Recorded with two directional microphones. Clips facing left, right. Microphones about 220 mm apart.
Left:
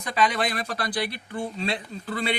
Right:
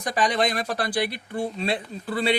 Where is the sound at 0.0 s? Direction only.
40° right (ahead or behind).